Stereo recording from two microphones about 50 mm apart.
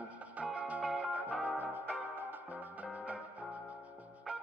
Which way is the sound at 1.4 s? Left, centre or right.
Right.